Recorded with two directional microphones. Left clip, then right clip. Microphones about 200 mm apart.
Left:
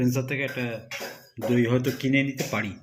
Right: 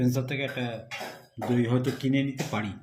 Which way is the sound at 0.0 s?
Centre (ahead or behind).